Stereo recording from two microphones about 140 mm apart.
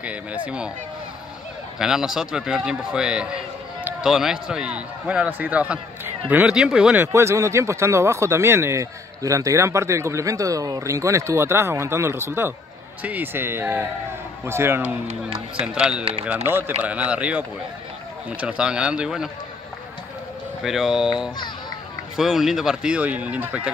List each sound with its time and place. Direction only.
0.0 s a man's voice: 10° right (ahead or behind)
1.8 s a man's voice: 5° right (ahead or behind)
7.1 s a man's voice: 20° right (ahead or behind)
15.6 s a man's voice: 5° right (ahead or behind)
20.6 s speech: 5° right (ahead or behind)